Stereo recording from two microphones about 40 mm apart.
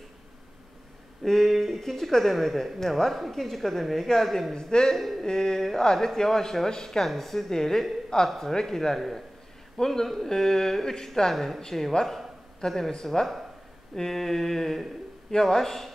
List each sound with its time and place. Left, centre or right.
1.2 s speech: centre
4.6 s a man's voice: centre
10.0 s a man's voice: centre
10.3 s speech: centre
11.3 s a man's voice: centre